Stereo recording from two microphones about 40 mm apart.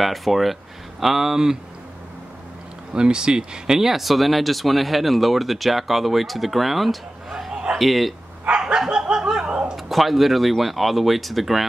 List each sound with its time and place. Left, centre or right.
0.0 s speech: centre
2.9 s speech: right; by 7.0 s centre
7.2 s a sound: centre
7.7 s speech: centre
8.5 s dog: right
9.8 s speech: centre